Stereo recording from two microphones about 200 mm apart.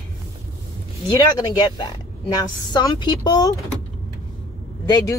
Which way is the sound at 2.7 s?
20° left (ahead or behind).